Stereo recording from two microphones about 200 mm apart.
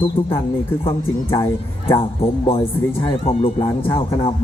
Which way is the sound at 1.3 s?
20° left (ahead or behind).